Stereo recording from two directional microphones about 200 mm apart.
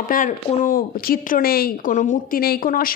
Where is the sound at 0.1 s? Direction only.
40° left (ahead or behind).